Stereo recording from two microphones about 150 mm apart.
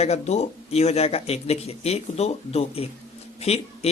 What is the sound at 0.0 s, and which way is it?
A man's voice, 45° left (ahead or behind).